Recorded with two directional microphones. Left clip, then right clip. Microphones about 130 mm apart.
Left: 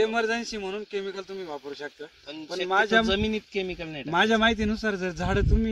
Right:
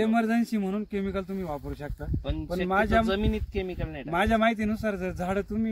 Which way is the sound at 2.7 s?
30° right (ahead or behind).